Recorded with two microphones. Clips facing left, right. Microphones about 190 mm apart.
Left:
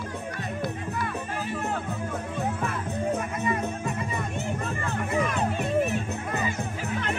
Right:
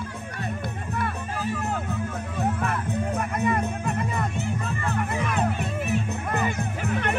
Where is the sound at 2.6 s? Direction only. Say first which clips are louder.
Right 1 dB; 55° right (ahead or behind).